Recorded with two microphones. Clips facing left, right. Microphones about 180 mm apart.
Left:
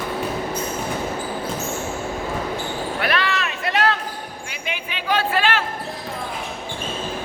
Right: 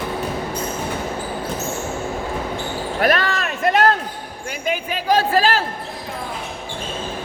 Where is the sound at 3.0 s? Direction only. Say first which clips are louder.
Right 5 dB; 45° right (ahead or behind).